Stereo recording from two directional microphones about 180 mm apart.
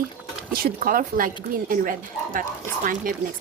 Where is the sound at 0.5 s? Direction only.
55° right (ahead or behind).